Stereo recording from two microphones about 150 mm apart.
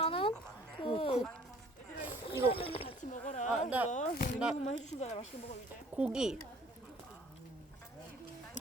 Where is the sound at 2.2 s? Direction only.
40° left (ahead or behind).